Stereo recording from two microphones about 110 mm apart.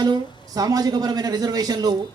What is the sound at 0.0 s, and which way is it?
Speech, 35° right (ahead or behind).